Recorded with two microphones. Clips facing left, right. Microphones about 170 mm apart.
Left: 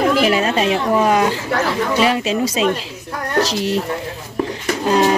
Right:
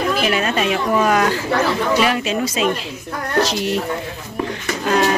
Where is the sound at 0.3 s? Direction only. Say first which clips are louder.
Left 2 dB; 30° left (ahead or behind).